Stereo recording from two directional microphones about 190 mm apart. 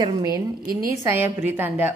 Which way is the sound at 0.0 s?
20° right (ahead or behind).